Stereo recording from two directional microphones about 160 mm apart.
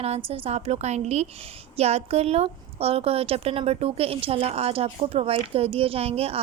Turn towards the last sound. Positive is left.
turn(degrees=-40)  # may be behind; listen again after turning